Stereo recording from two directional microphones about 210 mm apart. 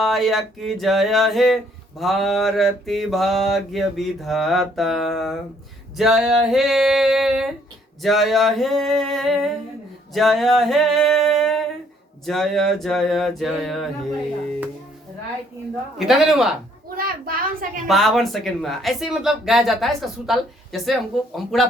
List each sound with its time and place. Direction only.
0.0 s speech: centre (ahead or behind)
16.0 s speech: centre (ahead or behind)
17.0 s a sound: 40° right (ahead or behind)
17.8 s speech: centre (ahead or behind)